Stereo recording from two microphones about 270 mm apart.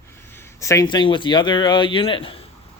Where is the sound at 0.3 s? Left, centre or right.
Centre.